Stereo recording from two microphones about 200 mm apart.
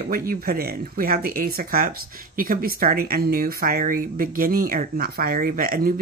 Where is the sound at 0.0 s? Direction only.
45° right (ahead or behind).